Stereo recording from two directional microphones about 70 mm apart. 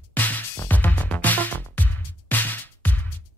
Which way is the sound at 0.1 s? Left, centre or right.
Left.